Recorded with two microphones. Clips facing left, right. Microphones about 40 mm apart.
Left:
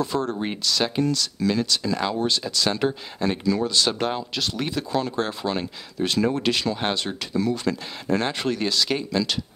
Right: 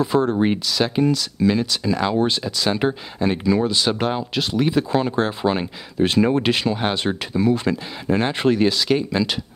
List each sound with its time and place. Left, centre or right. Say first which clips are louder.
0.0 s speech: right 7 dB; centre
2.4 s speech: right 3 dB; centre